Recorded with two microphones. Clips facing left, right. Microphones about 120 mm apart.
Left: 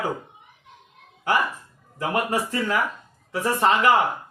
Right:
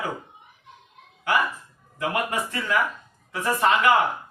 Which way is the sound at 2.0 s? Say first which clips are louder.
Left 2 dB; 35° left (ahead or behind).